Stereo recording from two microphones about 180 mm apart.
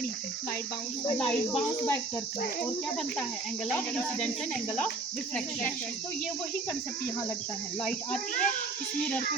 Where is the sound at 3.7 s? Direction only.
5° left (ahead or behind).